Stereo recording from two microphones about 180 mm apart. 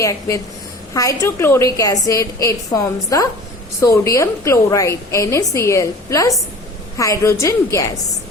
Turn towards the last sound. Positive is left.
turn(degrees=15)  # may be behind; listen again after turning